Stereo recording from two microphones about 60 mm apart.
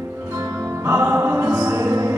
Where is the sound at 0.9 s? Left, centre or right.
Right.